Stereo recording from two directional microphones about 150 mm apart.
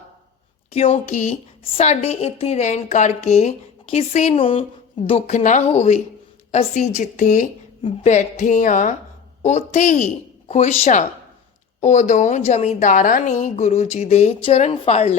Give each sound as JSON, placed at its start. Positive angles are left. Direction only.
{"t": 0.7, "sound": "a woman's voice", "side_deg": 45}